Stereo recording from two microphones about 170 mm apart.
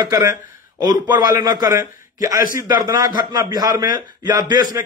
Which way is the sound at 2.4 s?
55° left (ahead or behind).